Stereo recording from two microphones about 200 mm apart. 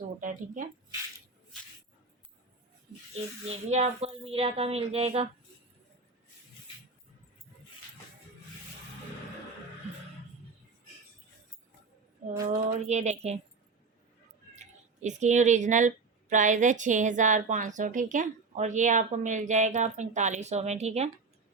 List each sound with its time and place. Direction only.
0.2 s a woman's voice: 40° right (ahead or behind)
3.4 s speech: 30° right (ahead or behind)
12.5 s a woman's voice: 35° right (ahead or behind)
15.0 s a woman's voice: 35° right (ahead or behind)